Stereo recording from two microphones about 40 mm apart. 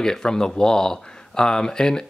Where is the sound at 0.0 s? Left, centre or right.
Centre.